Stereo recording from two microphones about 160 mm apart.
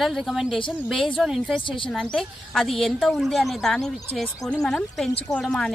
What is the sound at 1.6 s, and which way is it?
Speech, 30° left (ahead or behind).